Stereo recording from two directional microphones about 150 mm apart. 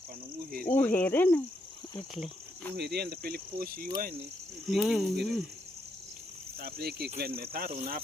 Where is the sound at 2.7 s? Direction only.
90° right; by 3.9 s 75° right (ahead or behind).